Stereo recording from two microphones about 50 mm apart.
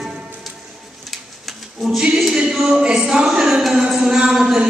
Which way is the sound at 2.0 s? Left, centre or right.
Centre.